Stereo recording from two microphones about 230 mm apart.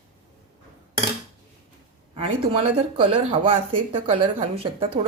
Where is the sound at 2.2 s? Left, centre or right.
Right.